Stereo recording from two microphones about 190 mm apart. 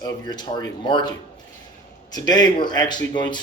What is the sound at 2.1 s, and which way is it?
Speech, 20° left (ahead or behind).